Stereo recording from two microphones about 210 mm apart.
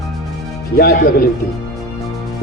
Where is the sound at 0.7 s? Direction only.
45° left (ahead or behind).